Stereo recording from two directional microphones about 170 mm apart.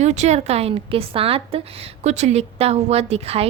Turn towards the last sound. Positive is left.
turn(degrees=-35)  # may be behind; listen again after turning